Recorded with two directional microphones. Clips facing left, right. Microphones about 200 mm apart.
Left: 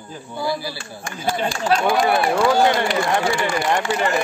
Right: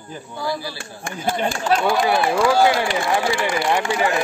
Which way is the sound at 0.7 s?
55° right (ahead or behind).